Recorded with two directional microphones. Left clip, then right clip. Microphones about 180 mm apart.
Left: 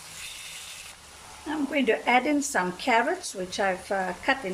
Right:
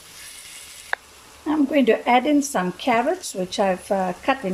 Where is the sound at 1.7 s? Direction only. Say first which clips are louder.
Right 4 dB; 25° right (ahead or behind).